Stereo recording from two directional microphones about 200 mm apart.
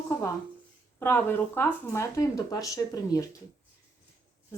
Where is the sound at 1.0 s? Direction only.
10° left (ahead or behind).